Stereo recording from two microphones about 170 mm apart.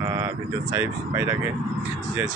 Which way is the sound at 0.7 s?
20° right (ahead or behind).